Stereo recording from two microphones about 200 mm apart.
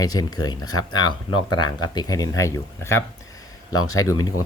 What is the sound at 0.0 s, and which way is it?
Speech, 20° left (ahead or behind).